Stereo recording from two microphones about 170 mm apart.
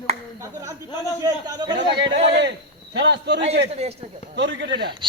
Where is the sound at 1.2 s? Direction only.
25° right (ahead or behind).